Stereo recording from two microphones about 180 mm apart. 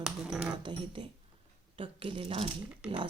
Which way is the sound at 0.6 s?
30° right (ahead or behind).